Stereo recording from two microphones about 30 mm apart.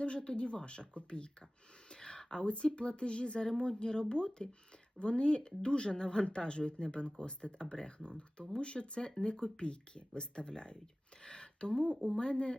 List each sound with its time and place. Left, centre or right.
0.0 s speech: left
11.2 s a sound: left
12.1 s speech: left